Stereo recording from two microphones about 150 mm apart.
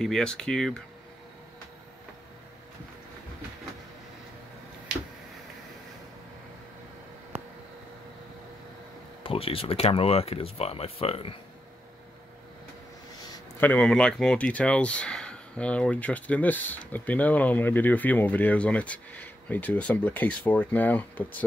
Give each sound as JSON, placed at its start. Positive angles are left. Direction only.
{"t": 0.0, "sound": "speech", "side_deg": 5}
{"t": 9.2, "sound": "speech", "side_deg": 40}
{"t": 13.6, "sound": "speech", "side_deg": 10}